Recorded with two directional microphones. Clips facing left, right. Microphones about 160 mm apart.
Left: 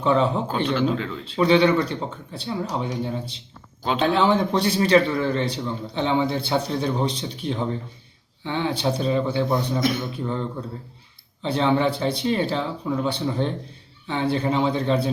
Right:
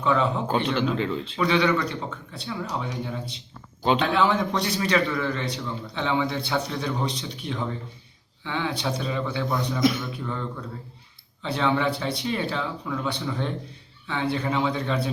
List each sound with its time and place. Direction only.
0.0 s a man's voice: 30° left (ahead or behind)
11.4 s a man's voice: 30° left (ahead or behind)